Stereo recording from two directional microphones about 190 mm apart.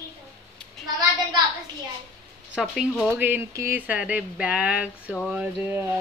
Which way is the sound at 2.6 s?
Centre (ahead or behind).